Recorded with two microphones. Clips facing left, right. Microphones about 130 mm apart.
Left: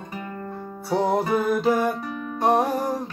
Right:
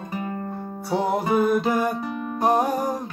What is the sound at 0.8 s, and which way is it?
Music, centre (ahead or behind).